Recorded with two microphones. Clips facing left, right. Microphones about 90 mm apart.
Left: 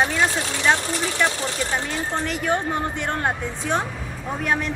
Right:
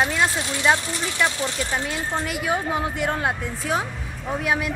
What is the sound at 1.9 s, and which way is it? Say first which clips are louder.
Speech: left 1 dB; 5° right (ahead or behind).